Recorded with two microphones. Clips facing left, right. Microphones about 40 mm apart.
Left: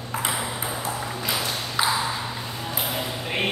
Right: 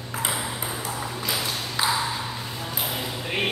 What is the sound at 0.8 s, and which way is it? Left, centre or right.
Ping, centre.